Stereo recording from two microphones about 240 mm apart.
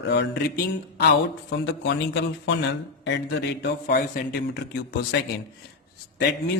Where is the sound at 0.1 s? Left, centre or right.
Left.